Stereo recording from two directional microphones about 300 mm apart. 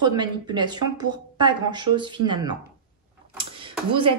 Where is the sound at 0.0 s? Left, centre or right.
Centre.